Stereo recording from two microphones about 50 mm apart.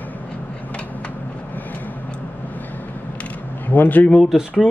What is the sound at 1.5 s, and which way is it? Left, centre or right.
Vehicle, left.